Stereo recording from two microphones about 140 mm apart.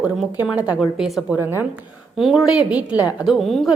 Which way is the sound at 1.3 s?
15° right (ahead or behind).